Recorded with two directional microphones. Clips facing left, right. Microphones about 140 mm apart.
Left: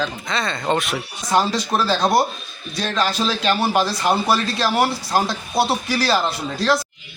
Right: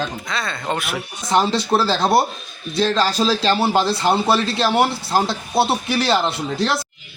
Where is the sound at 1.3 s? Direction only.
25° right (ahead or behind).